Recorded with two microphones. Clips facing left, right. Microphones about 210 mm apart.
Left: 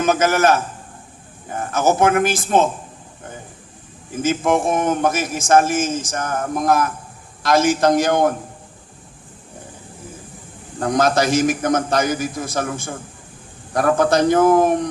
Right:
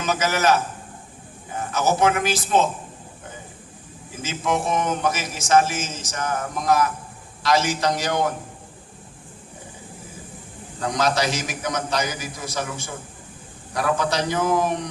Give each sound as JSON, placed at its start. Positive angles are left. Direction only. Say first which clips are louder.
{"t": 0.0, "sound": "a man's voice", "louder": "left 6 dB", "side_deg": 50}
{"t": 4.1, "sound": "a man's voice", "louder": "left 7 dB", "side_deg": 50}
{"t": 10.8, "sound": "a man's voice", "louder": "left 5 dB", "side_deg": 50}